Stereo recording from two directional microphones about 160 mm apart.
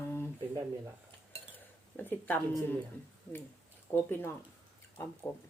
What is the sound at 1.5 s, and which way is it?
Speech, 10° left (ahead or behind).